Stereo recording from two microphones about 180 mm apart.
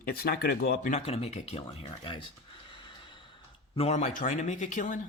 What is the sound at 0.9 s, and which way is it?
Speech, 35° left (ahead or behind).